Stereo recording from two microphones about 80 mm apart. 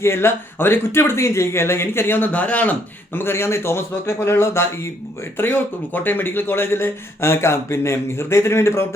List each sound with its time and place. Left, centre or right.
0.0 s speech: left
3.2 s speech: left
5.4 s speech: left